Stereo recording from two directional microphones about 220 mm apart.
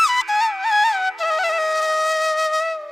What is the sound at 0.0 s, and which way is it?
Flute, centre (ahead or behind).